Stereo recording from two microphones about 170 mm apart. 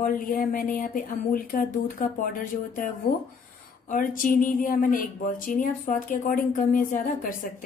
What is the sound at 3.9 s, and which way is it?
Speech, 55° left (ahead or behind).